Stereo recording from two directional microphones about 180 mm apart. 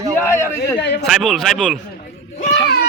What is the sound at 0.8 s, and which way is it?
Speech, 70° left (ahead or behind).